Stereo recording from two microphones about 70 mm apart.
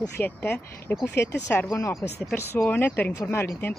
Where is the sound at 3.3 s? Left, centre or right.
Left.